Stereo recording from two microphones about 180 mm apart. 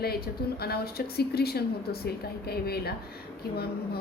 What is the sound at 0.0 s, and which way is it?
A woman's voice, 60° left (ahead or behind).